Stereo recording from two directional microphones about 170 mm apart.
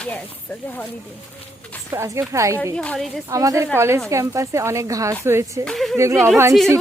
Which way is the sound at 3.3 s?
20° right (ahead or behind).